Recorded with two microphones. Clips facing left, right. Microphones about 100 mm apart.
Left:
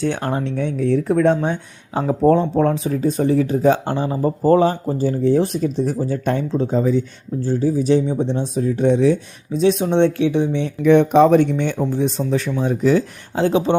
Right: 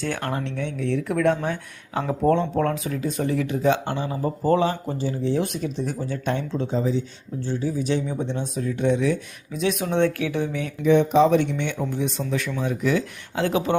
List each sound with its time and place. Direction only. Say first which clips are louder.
0.2 s speech: left 6 dB; 30° left (ahead or behind)
10.8 s speech: left 5 dB; 60° left (ahead or behind); by 13.7 s 30° left (ahead or behind)